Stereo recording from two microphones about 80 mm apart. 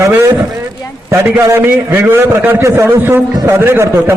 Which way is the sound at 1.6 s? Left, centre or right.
Right.